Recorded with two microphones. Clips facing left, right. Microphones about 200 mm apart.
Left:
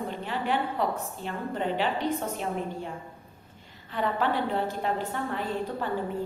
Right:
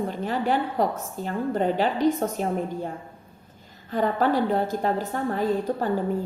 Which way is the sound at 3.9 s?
40° right (ahead or behind).